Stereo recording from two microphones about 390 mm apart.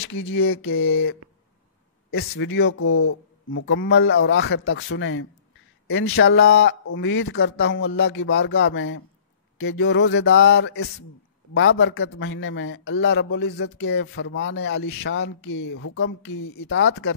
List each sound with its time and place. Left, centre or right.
0.0 s a man's voice: left